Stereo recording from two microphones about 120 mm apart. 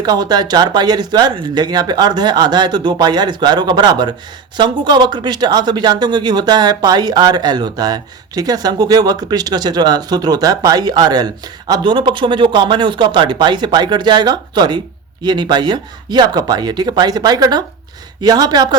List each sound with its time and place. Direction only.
0.0 s speech: 35° right (ahead or behind)